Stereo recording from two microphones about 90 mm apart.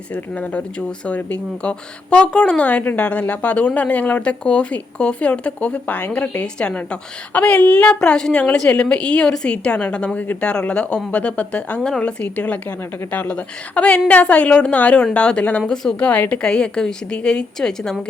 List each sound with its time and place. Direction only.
0.1 s speech: 15° left (ahead or behind)